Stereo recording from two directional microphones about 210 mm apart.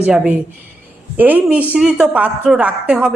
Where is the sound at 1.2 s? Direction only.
10° right (ahead or behind).